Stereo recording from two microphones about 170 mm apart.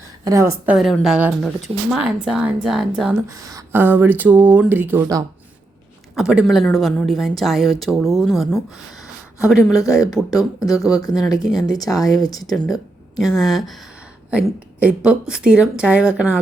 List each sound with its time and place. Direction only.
0.3 s a woman's voice: 15° right (ahead or behind)
3.2 s speech: 20° right (ahead or behind)
6.1 s a woman's voice: 5° right (ahead or behind)
10.6 s speech: 20° left (ahead or behind)
12.5 s a woman's voice: centre (ahead or behind)